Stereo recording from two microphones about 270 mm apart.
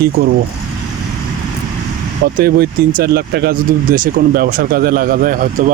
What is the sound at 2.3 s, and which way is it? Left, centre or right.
Speech, right.